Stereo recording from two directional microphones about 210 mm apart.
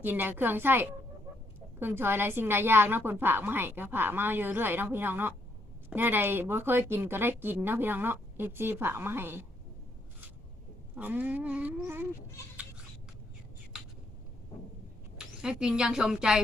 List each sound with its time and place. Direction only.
0.0 s speech: 10° right (ahead or behind)
10.9 s speech: 10° right (ahead or behind)
15.4 s a woman's voice: 5° right (ahead or behind)